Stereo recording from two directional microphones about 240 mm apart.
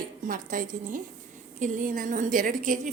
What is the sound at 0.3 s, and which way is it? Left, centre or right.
A woman's voice, right.